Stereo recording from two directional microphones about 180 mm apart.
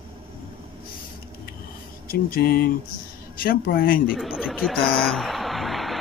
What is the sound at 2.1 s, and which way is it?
Speech, 55° left (ahead or behind).